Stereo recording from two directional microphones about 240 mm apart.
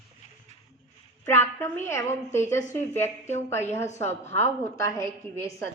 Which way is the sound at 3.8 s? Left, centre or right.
Left.